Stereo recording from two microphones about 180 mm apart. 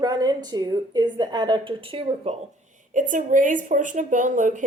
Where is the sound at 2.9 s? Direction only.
45° right (ahead or behind).